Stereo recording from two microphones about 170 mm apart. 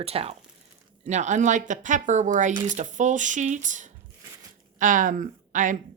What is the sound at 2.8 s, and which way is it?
A woman's voice, 45° right (ahead or behind).